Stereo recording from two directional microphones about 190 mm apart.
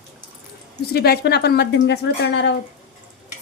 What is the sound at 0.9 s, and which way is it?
Speech, 55° left (ahead or behind).